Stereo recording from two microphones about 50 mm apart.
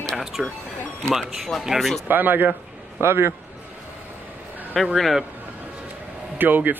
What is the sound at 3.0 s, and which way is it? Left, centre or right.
Speech, right.